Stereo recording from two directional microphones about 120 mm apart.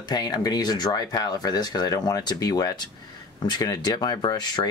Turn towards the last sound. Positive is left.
turn(degrees=35)  # may be behind; listen again after turning